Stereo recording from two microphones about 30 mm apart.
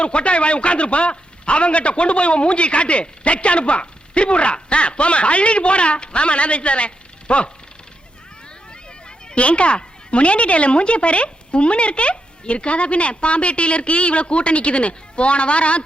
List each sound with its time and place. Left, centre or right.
0.0 s a man's voice: left
9.0 s a man's voice: left